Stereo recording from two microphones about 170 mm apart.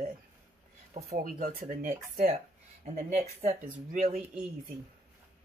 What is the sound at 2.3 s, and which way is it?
Speech, 40° right (ahead or behind).